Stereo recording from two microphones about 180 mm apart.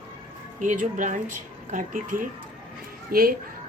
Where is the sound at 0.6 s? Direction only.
45° right (ahead or behind).